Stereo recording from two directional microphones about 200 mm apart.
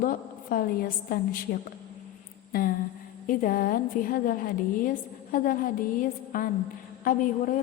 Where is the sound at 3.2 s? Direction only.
45° left (ahead or behind).